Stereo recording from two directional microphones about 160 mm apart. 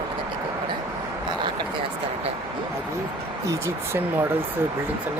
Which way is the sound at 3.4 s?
15° right (ahead or behind).